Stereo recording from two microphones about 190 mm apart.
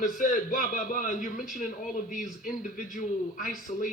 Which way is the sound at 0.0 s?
40° left (ahead or behind).